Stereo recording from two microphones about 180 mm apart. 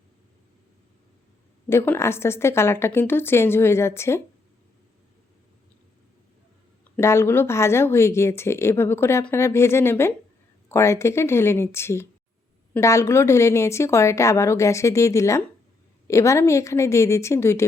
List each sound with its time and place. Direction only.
1.7 s speech: 10° left (ahead or behind)
6.9 s speech: 15° left (ahead or behind)